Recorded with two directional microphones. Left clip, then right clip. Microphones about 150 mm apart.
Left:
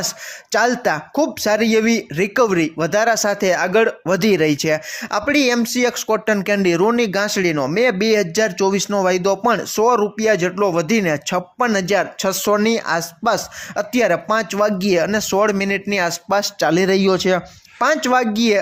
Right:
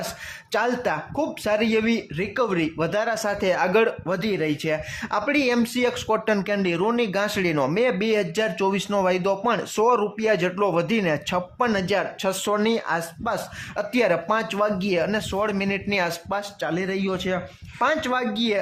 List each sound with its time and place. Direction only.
0.5 s speech: 25° left (ahead or behind)
2.6 s speech: 20° left (ahead or behind)
4.1 s speech: 35° left (ahead or behind)
16.3 s speech: 40° left (ahead or behind)
16.9 s speech: 55° left (ahead or behind)
17.7 s speech: 30° left (ahead or behind)